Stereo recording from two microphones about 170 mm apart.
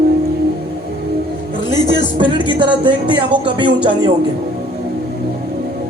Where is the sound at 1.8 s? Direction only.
30° right (ahead or behind).